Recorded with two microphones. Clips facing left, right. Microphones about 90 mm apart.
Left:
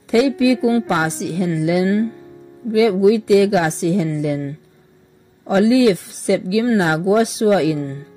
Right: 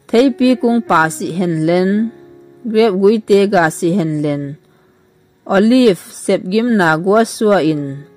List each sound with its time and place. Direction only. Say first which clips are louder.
0.1 s a woman's voice: right 4 dB; 55° right (ahead or behind)
1.9 s speech: right 3 dB; 30° right (ahead or behind)
2.7 s a woman's voice: right 3 dB; 60° right (ahead or behind)
5.4 s a woman's voice: right 4 dB; 60° right (ahead or behind)